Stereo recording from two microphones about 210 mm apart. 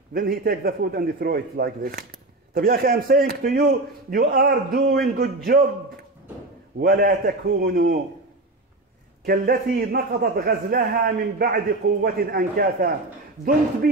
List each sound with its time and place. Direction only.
0.1 s a man's voice: 45° right (ahead or behind)
6.8 s a man's voice: 45° right (ahead or behind)
9.2 s a man's voice: 45° right (ahead or behind)